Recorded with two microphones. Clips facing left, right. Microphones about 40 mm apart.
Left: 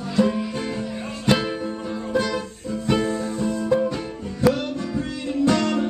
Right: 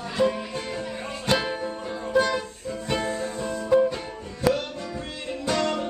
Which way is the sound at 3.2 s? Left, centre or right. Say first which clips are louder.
Left 4 dB; right.